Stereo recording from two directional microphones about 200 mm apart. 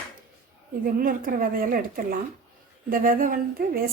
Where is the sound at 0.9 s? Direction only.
45° right (ahead or behind).